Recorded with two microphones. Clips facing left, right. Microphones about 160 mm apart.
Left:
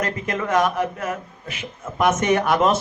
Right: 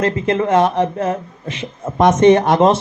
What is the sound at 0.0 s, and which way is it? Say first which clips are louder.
A man's voice: right 8 dB; 30° right (ahead or behind).